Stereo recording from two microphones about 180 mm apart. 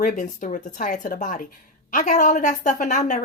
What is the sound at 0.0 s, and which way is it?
Speech, 45° left (ahead or behind).